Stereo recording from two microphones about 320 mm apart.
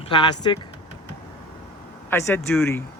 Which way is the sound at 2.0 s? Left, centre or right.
Centre.